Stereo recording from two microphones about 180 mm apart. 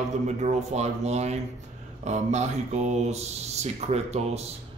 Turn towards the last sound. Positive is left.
turn(degrees=-35)  # may be behind; listen again after turning